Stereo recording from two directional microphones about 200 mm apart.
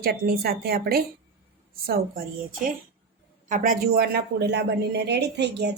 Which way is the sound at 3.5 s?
40° right (ahead or behind).